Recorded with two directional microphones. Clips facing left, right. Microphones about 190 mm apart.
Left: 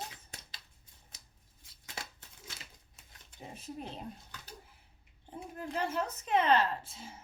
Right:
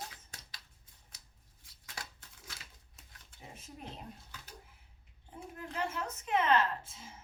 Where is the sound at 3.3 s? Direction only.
35° left (ahead or behind).